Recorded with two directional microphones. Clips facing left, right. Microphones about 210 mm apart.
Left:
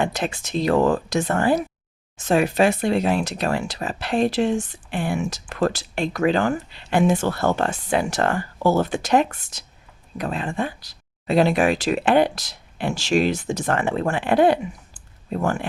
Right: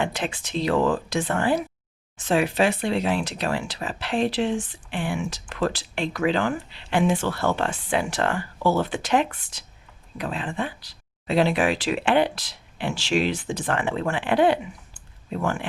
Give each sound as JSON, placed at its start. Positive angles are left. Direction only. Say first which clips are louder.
{"t": 0.0, "sound": "speech", "louder": "left 3 dB", "side_deg": 40}